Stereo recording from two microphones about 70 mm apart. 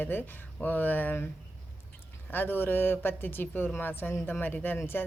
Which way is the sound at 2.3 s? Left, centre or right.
Left.